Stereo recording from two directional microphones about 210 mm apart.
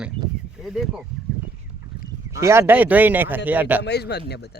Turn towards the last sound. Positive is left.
turn(degrees=50)  # may be behind; listen again after turning